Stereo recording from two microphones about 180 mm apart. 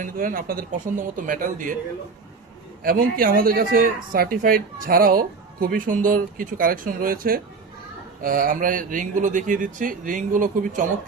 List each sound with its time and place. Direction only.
0.0 s speech: 50° right (ahead or behind)
2.8 s speech: 55° right (ahead or behind)